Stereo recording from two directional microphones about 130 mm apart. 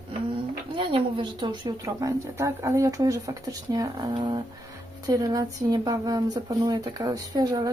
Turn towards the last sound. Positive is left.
turn(degrees=-30)  # may be behind; listen again after turning